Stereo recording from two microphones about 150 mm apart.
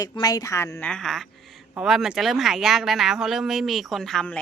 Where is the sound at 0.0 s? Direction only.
25° left (ahead or behind).